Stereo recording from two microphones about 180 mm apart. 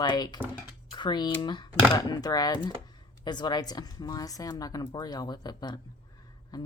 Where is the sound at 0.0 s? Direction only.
25° left (ahead or behind).